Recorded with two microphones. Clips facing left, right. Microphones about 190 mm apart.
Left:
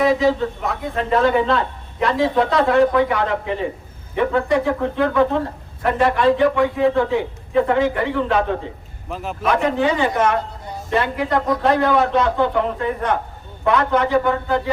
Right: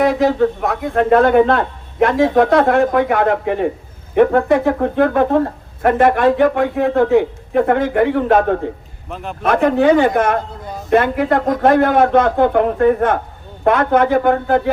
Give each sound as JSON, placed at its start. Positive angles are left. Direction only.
{"t": 0.0, "sound": "speech", "side_deg": -55}
{"t": 9.0, "sound": "a man's voice", "side_deg": 0}
{"t": 9.4, "sound": "speech", "side_deg": -50}